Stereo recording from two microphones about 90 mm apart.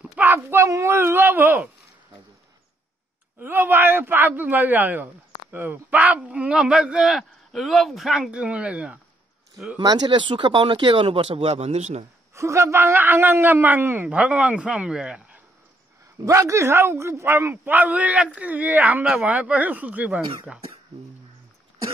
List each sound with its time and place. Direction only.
0.0 s a sound: 20° right (ahead or behind)
3.3 s speech: 20° right (ahead or behind)
9.8 s speech: 50° right (ahead or behind); by 12.1 s 90° right
12.4 s speech: 35° right (ahead or behind); by 15.4 s 15° right (ahead or behind)
16.3 s speech: 35° right (ahead or behind); by 20.6 s 15° right (ahead or behind)